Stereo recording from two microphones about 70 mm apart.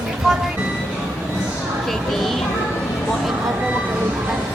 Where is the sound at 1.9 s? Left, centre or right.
Centre.